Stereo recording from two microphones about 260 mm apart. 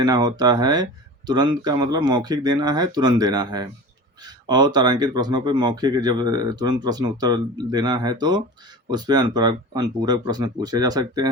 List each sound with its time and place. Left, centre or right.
0.0 s speech: centre